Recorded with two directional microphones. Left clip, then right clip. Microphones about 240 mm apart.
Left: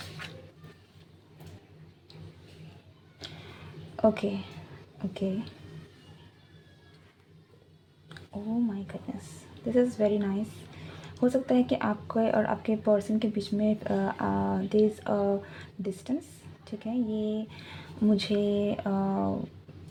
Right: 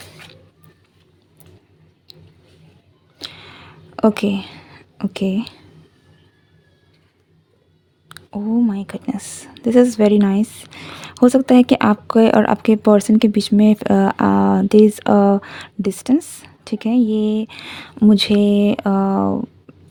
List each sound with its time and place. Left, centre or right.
3.2 s a sound: right
3.9 s a woman's voice: right
8.1 s a woman's voice: right